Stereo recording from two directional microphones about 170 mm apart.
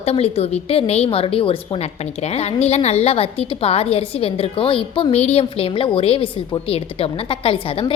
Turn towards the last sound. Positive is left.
turn(degrees=30)  # may be behind; listen again after turning